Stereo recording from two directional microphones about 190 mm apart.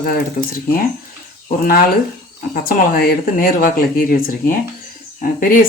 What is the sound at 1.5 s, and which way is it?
Speech, 50° left (ahead or behind).